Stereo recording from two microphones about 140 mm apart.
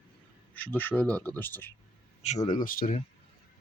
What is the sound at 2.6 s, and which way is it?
Speech, 90° left.